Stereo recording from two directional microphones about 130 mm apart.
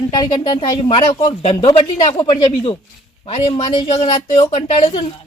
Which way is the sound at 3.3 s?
50° left (ahead or behind).